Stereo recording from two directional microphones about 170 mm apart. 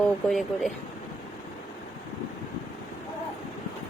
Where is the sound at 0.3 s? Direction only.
Centre (ahead or behind).